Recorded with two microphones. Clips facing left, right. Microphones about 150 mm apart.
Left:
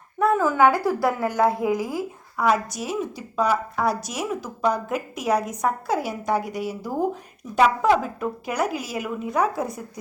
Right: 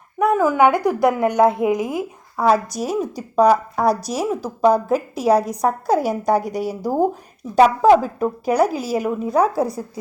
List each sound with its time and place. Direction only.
0.2 s a woman's voice: 15° right (ahead or behind)
2.3 s speech: 35° right (ahead or behind)